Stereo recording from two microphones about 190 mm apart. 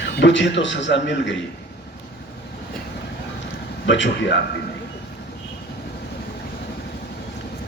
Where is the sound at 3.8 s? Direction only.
70° left (ahead or behind).